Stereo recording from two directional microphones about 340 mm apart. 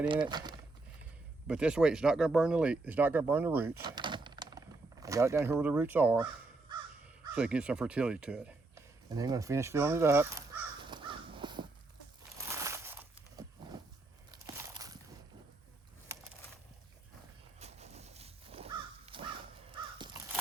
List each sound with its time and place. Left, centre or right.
0.1 s speech: centre
3.8 s a sound: centre
7.3 s speech: centre
10.8 s crow: centre
12.5 s a sound: centre
17.6 s crow: centre